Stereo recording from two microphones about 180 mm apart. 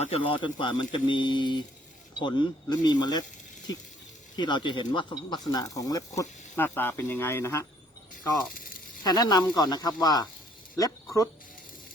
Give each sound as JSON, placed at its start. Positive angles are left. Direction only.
{"t": 0.0, "sound": "speech", "side_deg": 30}
{"t": 9.0, "sound": "speech", "side_deg": 20}